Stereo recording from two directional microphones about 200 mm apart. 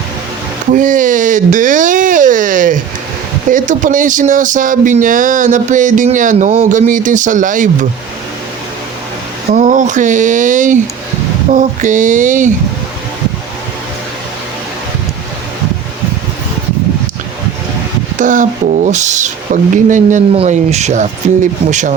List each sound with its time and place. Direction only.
0.7 s a sound: 40° right (ahead or behind)
3.5 s speech: 40° right (ahead or behind)
9.5 s speech: 40° right (ahead or behind)
18.2 s speech: 40° right (ahead or behind)